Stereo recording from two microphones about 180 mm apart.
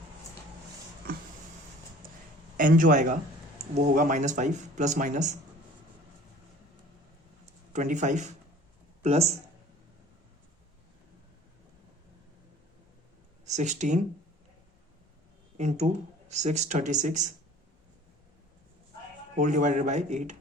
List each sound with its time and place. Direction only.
2.6 s speech: 45° right (ahead or behind)
7.4 s a sound: 40° right (ahead or behind)
9.0 s speech: 35° right (ahead or behind)
13.4 s speech: 40° right (ahead or behind)
15.5 s speech: 40° right (ahead or behind)
19.4 s speech: 45° right (ahead or behind)